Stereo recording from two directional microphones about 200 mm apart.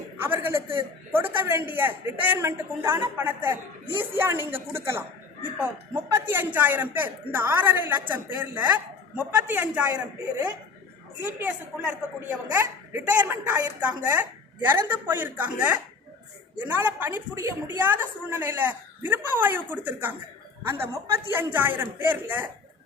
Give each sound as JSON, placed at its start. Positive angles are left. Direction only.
{"t": 0.2, "sound": "speech", "side_deg": -10}
{"t": 11.2, "sound": "speech", "side_deg": -10}